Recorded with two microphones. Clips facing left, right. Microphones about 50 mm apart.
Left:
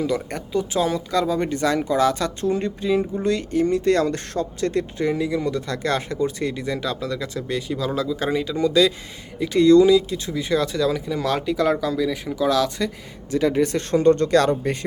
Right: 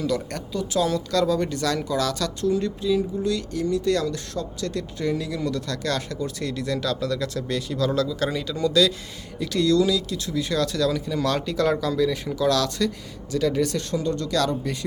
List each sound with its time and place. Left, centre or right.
0.0 s speech: centre
13.3 s speech: left
13.9 s speech: left